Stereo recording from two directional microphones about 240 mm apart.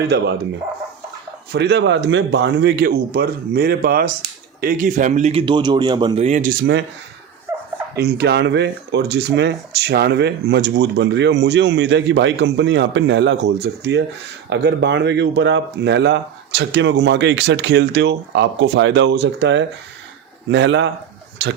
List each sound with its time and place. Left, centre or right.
0.0 s speech: right
1.5 s speech: right
7.9 s speech: right